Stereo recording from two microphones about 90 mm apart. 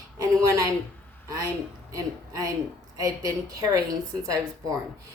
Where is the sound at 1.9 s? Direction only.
40° right (ahead or behind).